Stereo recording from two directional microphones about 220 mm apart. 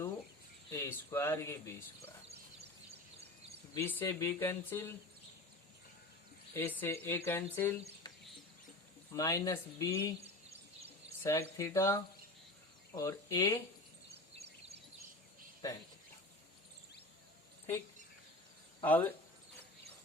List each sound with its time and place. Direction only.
0.7 s speech: 10° left (ahead or behind)
3.8 s speech: 10° left (ahead or behind)
6.5 s speech: 10° left (ahead or behind)
9.1 s speech: 15° left (ahead or behind)
10.2 s a sound: 30° right (ahead or behind)
11.2 s speech: 15° left (ahead or behind)
14.3 s a sound: 30° right (ahead or behind)
15.6 s speech: 15° left (ahead or behind)
18.9 s speech: 10° left (ahead or behind)